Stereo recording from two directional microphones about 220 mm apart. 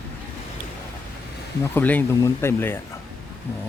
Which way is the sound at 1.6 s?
10° left (ahead or behind).